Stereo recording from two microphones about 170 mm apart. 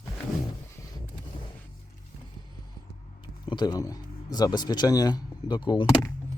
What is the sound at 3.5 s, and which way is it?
Speech, 25° left (ahead or behind).